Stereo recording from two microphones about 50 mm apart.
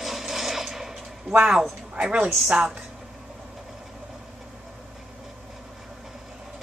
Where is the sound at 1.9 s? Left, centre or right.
Centre.